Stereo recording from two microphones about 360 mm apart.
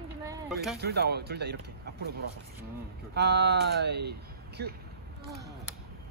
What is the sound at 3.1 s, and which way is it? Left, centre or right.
Speech, right.